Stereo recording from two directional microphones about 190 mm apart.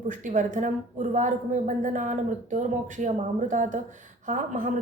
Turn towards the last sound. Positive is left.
turn(degrees=-45)  # may be behind; listen again after turning